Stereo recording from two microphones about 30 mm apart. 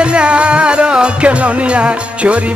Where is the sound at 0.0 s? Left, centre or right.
Right.